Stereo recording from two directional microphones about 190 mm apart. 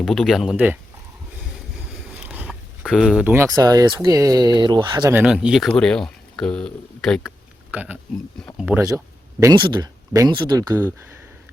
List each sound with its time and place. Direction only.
0.0 s speech: centre (ahead or behind)
1.9 s speech: 5° right (ahead or behind); by 5.1 s 25° right (ahead or behind)
5.1 s speech: 5° right (ahead or behind)
7.7 s speech: 10° right (ahead or behind)
9.4 s speech: 20° right (ahead or behind)